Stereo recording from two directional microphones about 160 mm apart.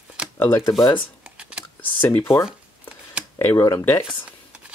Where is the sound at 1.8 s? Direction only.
10° left (ahead or behind).